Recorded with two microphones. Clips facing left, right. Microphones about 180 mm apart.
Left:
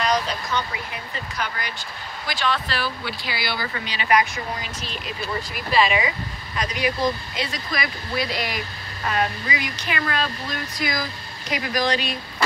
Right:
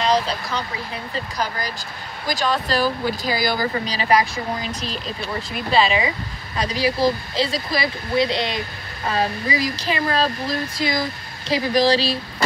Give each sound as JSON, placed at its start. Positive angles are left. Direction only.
{"t": 0.0, "sound": "speech", "side_deg": -30}